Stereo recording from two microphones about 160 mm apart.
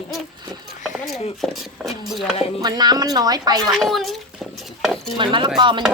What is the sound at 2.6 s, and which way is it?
A woman's voice, 25° right (ahead or behind).